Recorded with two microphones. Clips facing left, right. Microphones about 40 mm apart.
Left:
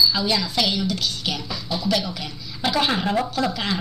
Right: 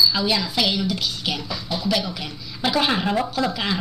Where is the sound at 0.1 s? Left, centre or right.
Centre.